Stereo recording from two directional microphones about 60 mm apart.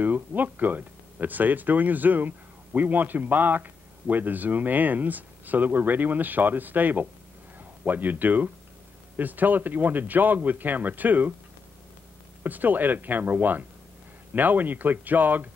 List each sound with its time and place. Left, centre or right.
0.0 s a man's voice: right
12.4 s speech: right